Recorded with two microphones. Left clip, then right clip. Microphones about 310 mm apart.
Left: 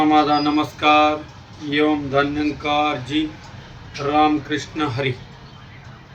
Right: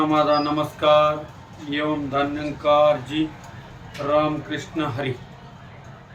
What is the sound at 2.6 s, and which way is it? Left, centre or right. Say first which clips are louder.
A man's voice: right 5 dB; centre.